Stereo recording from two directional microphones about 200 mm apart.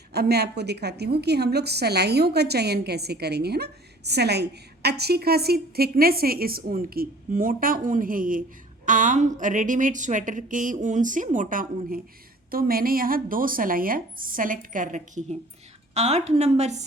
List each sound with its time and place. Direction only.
0.1 s a woman's voice: 55° right (ahead or behind); by 16.8 s 35° right (ahead or behind)